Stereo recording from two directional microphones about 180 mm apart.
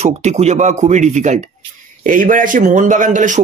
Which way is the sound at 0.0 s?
40° right (ahead or behind).